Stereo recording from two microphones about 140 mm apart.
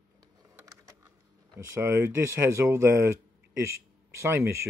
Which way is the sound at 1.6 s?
20° right (ahead or behind).